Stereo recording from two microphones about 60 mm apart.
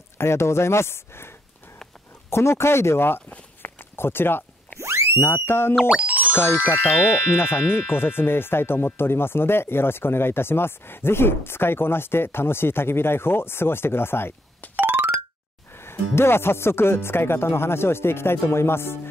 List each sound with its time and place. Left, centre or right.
0.2 s speech: left
3.3 s walk: left
3.9 s a sound: left
4.7 s a sound: right
5.2 s speech: left
5.9 s music: right
6.3 s speech: left
14.8 s a sound: right
15.7 s speech: left